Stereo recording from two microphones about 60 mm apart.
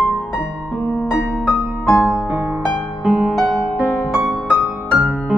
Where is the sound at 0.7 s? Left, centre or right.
Centre.